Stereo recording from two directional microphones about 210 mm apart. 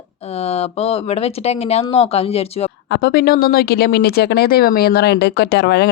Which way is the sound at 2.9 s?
50° left (ahead or behind).